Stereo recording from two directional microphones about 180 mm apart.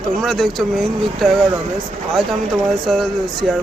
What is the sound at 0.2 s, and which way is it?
Speech, centre (ahead or behind).